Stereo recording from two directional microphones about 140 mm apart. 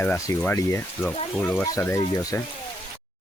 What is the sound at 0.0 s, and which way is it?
Speech, 20° left (ahead or behind).